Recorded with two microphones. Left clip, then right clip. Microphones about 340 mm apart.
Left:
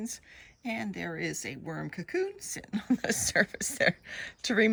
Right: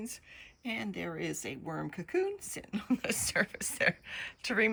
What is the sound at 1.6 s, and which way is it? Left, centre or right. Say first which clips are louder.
Speech: left 1 dB; left.